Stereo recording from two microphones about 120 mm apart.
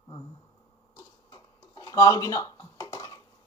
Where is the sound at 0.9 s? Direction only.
35° left (ahead or behind).